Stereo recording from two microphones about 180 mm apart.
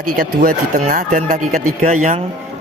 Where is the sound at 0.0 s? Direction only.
50° right (ahead or behind).